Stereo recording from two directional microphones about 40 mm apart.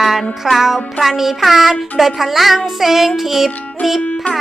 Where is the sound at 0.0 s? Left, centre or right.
Centre.